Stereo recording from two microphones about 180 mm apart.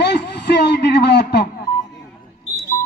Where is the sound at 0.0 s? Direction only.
70° left (ahead or behind).